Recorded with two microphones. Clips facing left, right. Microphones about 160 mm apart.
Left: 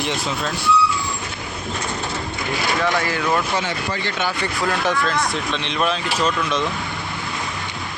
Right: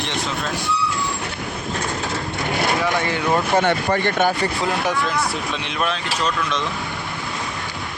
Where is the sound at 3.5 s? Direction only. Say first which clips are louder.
Right 6 dB; 55° right (ahead or behind).